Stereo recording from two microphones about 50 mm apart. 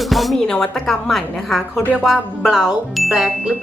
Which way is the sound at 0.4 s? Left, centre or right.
Centre.